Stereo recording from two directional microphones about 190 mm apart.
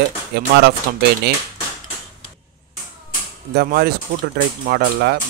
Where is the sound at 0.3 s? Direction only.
55° right (ahead or behind).